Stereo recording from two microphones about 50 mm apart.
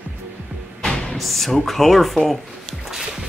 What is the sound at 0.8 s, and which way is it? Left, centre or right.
Music, centre.